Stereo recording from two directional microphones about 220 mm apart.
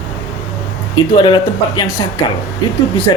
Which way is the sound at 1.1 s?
20° left (ahead or behind).